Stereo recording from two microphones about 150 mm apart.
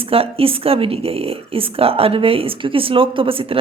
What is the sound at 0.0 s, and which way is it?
Speech, 40° right (ahead or behind).